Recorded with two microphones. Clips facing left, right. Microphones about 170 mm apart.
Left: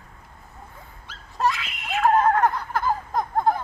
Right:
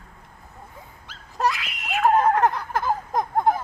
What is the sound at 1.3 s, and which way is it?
Screaming, 10° right (ahead or behind).